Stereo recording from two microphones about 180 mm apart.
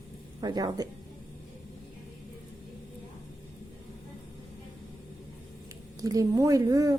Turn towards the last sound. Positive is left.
turn(degrees=-20)  # may be behind; listen again after turning